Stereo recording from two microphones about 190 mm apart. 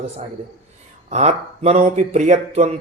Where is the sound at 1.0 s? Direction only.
35° right (ahead or behind).